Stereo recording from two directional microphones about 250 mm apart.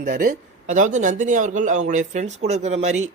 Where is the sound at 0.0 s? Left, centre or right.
Right.